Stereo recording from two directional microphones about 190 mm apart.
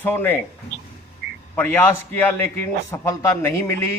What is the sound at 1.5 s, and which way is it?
A man's voice, 10° left (ahead or behind).